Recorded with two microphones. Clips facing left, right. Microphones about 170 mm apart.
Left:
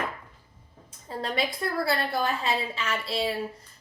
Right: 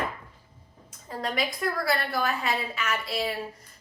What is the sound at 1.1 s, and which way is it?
A woman's voice, 30° left (ahead or behind).